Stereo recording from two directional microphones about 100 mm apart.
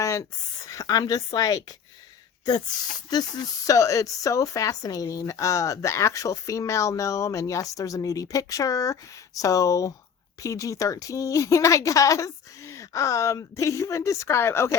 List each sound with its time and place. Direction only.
0.0 s a sound: 35° left (ahead or behind)
0.7 s speech: 35° left (ahead or behind)
3.1 s speech: 45° left (ahead or behind); by 14.8 s 25° left (ahead or behind)